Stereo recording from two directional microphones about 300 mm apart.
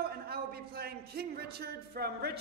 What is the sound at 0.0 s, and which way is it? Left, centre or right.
A man's voice, right.